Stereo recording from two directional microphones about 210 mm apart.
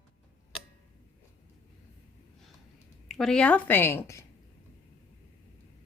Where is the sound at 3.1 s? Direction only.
Centre (ahead or behind).